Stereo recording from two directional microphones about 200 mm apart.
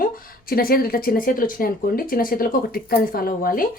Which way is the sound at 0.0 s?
45° left (ahead or behind).